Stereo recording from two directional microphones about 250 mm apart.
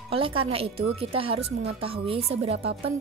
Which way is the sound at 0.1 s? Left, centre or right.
Right.